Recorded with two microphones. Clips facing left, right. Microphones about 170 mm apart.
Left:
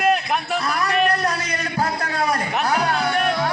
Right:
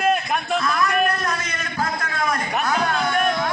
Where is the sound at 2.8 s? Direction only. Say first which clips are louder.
Even; 35° left (ahead or behind).